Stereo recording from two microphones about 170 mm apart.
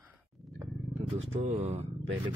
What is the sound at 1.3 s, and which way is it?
Speech, 35° right (ahead or behind).